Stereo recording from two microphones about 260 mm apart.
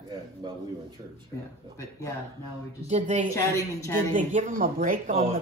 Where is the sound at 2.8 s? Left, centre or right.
Right.